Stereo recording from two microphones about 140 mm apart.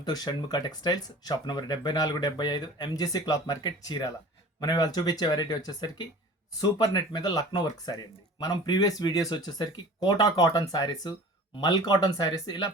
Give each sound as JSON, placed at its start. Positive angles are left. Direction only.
{"t": 0.0, "sound": "speech", "side_deg": 30}